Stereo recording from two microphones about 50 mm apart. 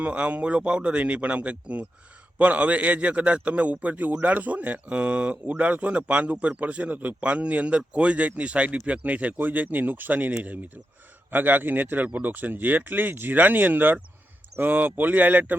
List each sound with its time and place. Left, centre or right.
0.0 s a man's voice: right